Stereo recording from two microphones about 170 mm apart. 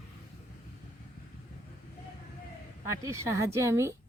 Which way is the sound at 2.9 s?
20° right (ahead or behind).